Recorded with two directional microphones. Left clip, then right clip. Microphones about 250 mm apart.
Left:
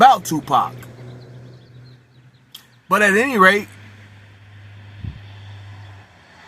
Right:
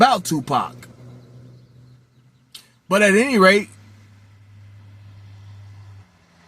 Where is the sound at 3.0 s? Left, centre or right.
Left.